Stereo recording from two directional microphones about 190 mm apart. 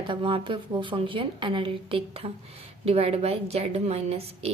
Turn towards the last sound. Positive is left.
turn(degrees=-30)  # may be behind; listen again after turning